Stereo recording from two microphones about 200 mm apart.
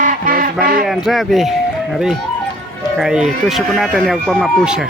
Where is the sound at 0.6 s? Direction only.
45° right (ahead or behind).